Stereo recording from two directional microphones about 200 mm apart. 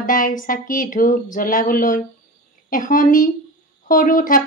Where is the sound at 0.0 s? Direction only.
40° left (ahead or behind).